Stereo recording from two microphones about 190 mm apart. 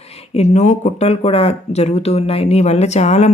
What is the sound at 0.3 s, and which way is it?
Speech, 35° left (ahead or behind).